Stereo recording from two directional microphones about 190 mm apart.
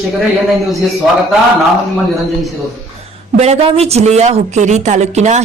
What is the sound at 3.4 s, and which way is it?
Speech, 30° right (ahead or behind).